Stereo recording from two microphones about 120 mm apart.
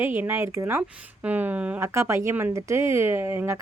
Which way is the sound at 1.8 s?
25° right (ahead or behind).